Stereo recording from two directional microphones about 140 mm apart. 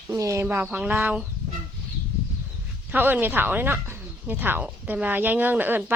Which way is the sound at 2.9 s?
15° right (ahead or behind).